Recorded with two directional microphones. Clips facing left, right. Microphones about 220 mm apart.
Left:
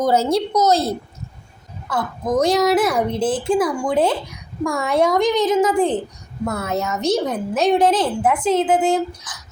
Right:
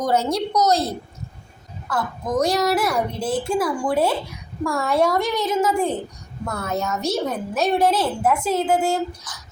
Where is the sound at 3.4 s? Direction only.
15° left (ahead or behind).